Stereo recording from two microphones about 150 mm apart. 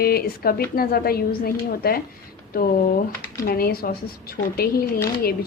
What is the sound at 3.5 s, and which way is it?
A woman's voice, 85° left.